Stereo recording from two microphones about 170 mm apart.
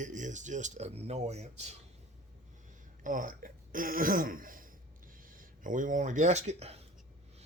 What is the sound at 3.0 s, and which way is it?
Speech, 50° right (ahead or behind).